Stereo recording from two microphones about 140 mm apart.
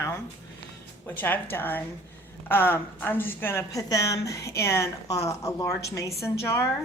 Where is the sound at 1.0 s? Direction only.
15° left (ahead or behind).